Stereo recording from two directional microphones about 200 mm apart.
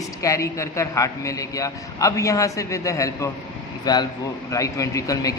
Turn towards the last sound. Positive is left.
turn(degrees=15)  # may be behind; listen again after turning